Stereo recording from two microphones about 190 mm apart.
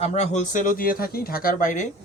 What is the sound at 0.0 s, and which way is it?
Speech, 35° left (ahead or behind).